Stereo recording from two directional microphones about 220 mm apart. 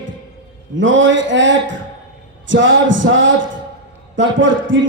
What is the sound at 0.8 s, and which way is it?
A man's voice, 60° right (ahead or behind).